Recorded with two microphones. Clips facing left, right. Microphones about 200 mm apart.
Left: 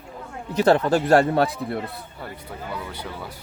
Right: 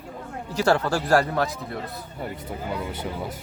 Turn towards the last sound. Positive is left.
turn(degrees=-20)  # may be behind; listen again after turning